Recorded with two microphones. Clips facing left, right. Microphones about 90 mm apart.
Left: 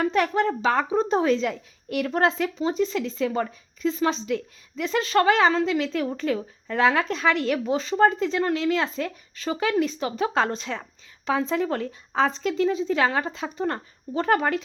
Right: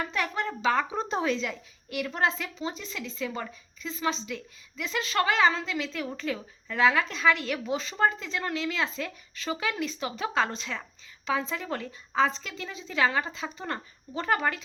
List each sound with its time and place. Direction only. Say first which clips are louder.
0.0 s speech: left 8 dB; 50° left (ahead or behind)
2.6 s speech: left 12 dB; 40° left (ahead or behind)
7.1 s speech: left 3 dB; 55° left (ahead or behind)
7.5 s speech: left 7 dB; 40° left (ahead or behind)